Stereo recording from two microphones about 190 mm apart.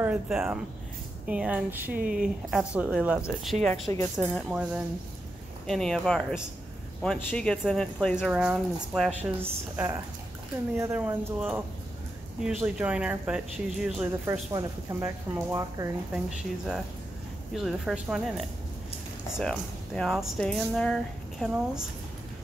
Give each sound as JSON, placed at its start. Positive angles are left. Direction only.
{"t": 0.0, "sound": "speech", "side_deg": -10}
{"t": 9.4, "sound": "speech", "side_deg": -10}
{"t": 14.2, "sound": "speech", "side_deg": -15}
{"t": 16.1, "sound": "speech", "side_deg": -5}